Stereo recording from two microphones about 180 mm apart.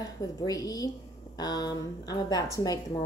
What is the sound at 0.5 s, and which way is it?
Speech, 20° left (ahead or behind).